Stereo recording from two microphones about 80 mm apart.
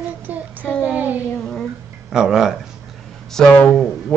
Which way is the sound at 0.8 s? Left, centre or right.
Centre.